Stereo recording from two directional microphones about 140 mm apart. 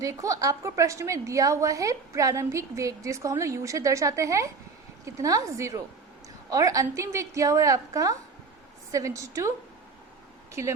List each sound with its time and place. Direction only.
0.0 s a woman's voice: 25° right (ahead or behind)
10.5 s a woman's voice: 20° right (ahead or behind)